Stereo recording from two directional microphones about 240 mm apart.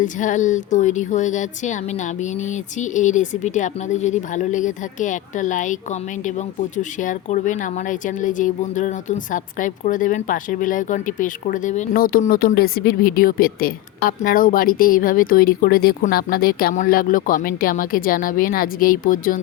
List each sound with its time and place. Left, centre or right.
0.0 s speech: left